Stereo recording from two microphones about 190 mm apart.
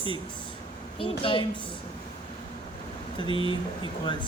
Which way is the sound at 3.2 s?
25° left (ahead or behind).